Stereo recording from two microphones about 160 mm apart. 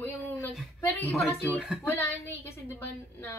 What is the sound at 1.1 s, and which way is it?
Speech, centre (ahead or behind).